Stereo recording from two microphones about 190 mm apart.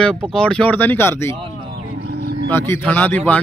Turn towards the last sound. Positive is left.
turn(degrees=10)  # may be behind; listen again after turning